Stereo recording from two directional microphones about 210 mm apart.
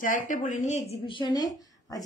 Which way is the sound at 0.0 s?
40° left (ahead or behind).